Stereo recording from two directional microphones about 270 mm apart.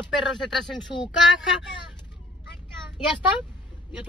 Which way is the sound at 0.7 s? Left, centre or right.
Centre.